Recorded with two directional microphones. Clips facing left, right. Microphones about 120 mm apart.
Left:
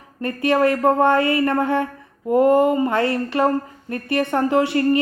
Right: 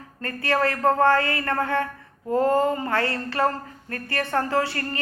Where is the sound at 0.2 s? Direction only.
20° left (ahead or behind).